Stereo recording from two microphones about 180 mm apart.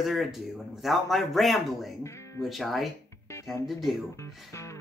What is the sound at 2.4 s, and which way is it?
Speech, centre (ahead or behind).